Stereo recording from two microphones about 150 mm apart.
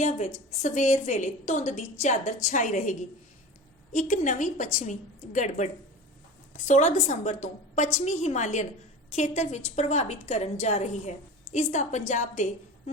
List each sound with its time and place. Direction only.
0.0 s a woman's voice: 55° left (ahead or behind)
3.9 s a woman's voice: 55° left (ahead or behind)